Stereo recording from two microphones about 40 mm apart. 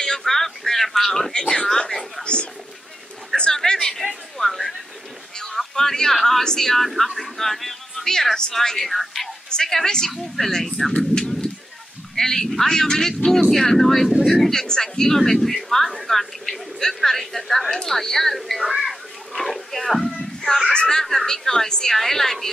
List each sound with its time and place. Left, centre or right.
0.0 s speech: centre
1.3 s speech: left
3.5 s speech: centre
4.0 s speech: centre
14.4 s speech: centre
20.1 s a sound: centre
20.7 s speech: left
21.0 s speech: centre